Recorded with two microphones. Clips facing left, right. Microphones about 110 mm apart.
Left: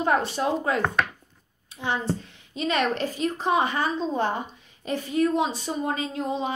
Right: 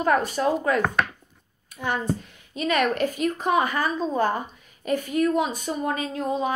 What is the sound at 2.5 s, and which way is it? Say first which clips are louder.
A woman's voice: right 2 dB; 30° left (ahead or behind).